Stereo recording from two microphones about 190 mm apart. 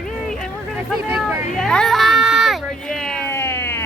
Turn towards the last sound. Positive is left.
turn(degrees=15)  # may be behind; listen again after turning